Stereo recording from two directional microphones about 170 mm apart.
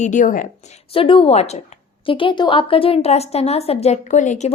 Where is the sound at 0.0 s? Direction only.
45° left (ahead or behind).